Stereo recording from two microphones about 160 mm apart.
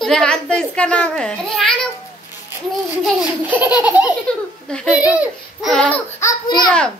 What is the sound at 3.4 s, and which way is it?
A child's voice, 10° right (ahead or behind).